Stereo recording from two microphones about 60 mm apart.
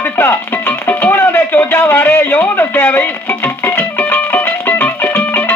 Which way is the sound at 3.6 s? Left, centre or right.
Left.